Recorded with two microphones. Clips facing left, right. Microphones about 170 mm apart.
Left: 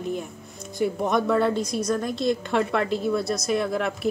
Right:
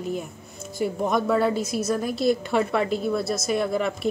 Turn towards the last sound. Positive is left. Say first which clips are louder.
# right 1 dB
turn(degrees=0)  # may be behind; listen again after turning